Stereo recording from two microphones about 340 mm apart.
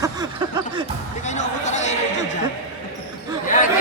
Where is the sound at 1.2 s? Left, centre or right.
Left.